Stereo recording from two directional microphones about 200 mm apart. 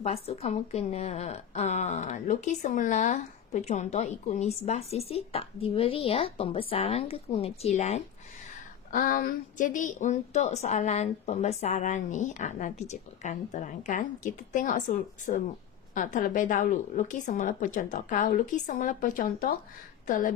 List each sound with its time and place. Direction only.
0.0 s a woman's voice: 30° left (ahead or behind)
8.9 s a woman's voice: 45° left (ahead or behind)